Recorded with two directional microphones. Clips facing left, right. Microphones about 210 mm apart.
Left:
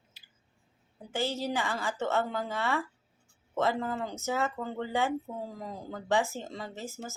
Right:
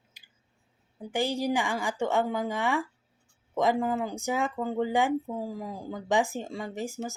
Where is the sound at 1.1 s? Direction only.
15° right (ahead or behind).